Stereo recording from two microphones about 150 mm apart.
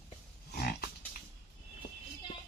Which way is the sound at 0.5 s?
90° left.